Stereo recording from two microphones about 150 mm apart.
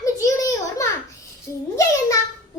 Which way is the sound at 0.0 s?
20° left (ahead or behind).